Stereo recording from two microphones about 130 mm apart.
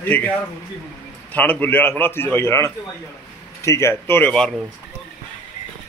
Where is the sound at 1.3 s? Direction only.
10° left (ahead or behind).